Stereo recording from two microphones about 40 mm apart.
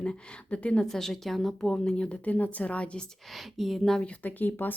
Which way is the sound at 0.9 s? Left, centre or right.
Centre.